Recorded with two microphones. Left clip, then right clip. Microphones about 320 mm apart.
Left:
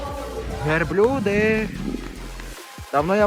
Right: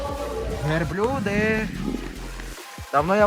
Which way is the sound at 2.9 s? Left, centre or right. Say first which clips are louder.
Even; right.